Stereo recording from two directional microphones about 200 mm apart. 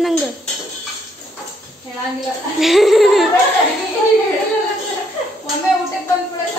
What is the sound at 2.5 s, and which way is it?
Speech, centre (ahead or behind).